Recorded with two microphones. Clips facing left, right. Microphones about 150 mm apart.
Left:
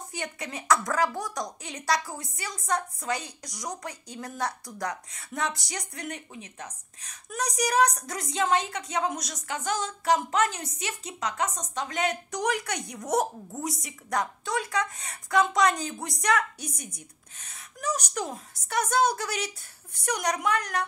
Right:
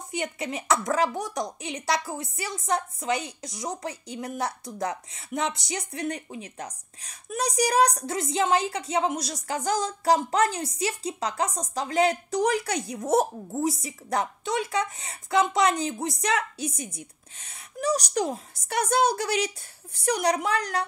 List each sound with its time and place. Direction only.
0.1 s a woman's voice: 25° right (ahead or behind)